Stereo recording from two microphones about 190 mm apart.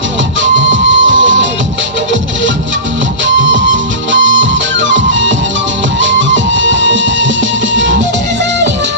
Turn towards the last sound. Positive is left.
turn(degrees=-80)